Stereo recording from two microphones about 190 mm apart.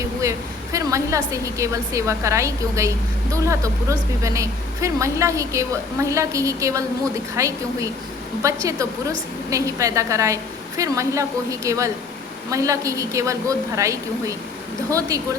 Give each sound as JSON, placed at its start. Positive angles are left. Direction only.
{"t": 0.2, "sound": "a woman's voice", "side_deg": -15}